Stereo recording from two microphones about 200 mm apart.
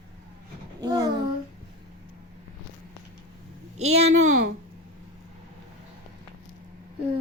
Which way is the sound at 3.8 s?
35° right (ahead or behind).